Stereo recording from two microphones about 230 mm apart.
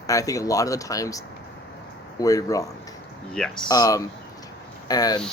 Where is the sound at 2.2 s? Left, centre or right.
Centre.